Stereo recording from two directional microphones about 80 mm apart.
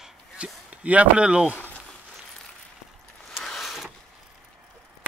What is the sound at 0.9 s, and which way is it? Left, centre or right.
Speech, centre.